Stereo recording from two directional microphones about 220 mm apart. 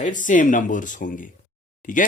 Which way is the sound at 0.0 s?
35° left (ahead or behind).